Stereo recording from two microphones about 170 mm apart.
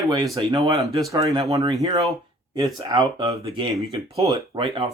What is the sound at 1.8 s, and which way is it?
Speech, 35° right (ahead or behind).